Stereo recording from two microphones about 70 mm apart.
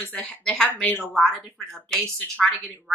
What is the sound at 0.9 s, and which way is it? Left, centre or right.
Speech, left.